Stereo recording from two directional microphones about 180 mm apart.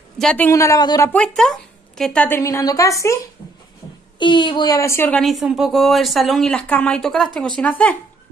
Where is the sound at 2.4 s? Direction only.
15° left (ahead or behind).